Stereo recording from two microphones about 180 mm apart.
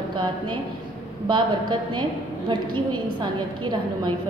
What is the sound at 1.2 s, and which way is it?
A woman's voice, 25° right (ahead or behind).